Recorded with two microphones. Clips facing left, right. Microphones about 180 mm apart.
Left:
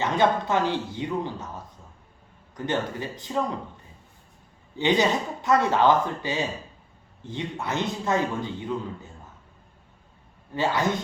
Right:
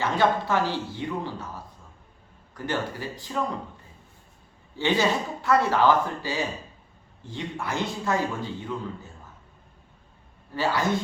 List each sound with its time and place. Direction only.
0.0 s a man's voice: 20° left (ahead or behind)
4.8 s a man's voice: 20° left (ahead or behind)
10.5 s a man's voice: 20° left (ahead or behind)